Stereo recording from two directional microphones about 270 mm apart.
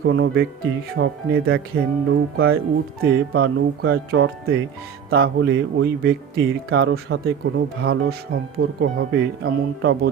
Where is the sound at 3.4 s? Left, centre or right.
Right.